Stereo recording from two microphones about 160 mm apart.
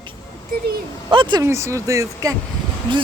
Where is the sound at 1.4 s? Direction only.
20° right (ahead or behind).